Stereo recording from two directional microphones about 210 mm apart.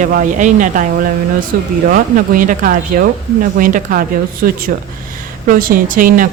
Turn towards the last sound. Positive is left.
turn(degrees=-40)  # may be behind; listen again after turning